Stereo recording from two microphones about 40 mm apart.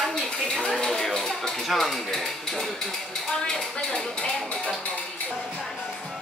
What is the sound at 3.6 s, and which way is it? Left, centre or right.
Speech, centre.